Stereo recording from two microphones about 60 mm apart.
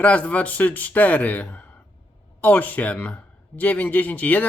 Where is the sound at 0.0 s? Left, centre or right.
Left.